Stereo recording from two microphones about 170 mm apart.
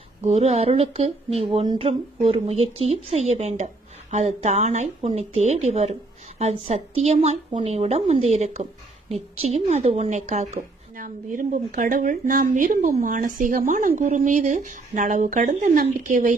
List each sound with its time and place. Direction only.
0.3 s a woman's voice: 40° right (ahead or behind)